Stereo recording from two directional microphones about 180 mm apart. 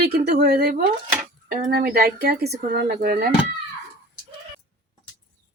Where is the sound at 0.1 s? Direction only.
65° right (ahead or behind).